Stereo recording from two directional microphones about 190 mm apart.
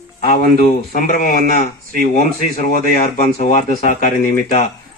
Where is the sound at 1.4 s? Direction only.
50° right (ahead or behind).